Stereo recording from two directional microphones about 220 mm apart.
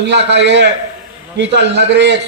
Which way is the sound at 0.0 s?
50° right (ahead or behind).